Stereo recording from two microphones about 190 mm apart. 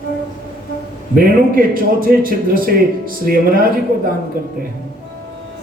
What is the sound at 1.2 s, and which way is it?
A man's voice, 50° right (ahead or behind).